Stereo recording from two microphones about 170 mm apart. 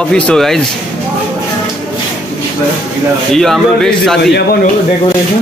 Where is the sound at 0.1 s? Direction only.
5° left (ahead or behind).